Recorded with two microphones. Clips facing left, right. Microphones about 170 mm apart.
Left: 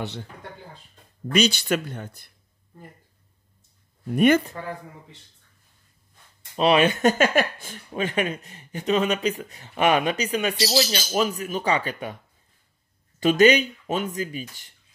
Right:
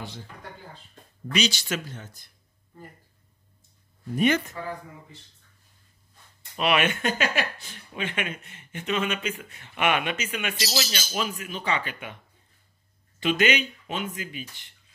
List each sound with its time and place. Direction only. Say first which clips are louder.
1.3 s speech: left 6 dB; 55° left (ahead or behind)
4.1 s speech: left 5 dB; 60° left (ahead or behind)
6.5 s speech: left 5 dB; 30° left (ahead or behind)
13.2 s speech: left 7 dB; 40° left (ahead or behind)